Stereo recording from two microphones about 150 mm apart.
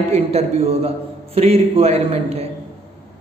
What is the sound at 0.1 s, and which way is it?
A man's voice, 45° right (ahead or behind).